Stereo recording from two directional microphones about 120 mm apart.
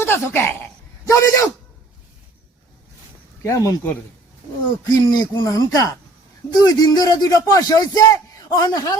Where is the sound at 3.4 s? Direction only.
25° left (ahead or behind).